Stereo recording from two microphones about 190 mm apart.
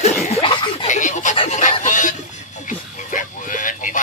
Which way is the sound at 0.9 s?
40° left (ahead or behind).